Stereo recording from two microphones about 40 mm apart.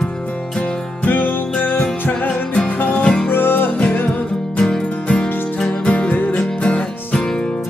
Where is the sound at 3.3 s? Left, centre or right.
Left.